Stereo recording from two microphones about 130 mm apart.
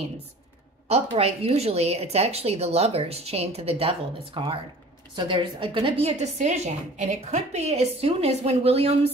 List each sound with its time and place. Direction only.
0.8 s a woman's voice: 50° right (ahead or behind)